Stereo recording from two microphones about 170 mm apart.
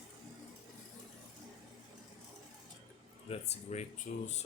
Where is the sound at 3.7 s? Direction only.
40° left (ahead or behind).